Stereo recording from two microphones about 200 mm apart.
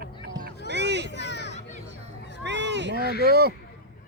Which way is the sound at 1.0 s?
60° left (ahead or behind).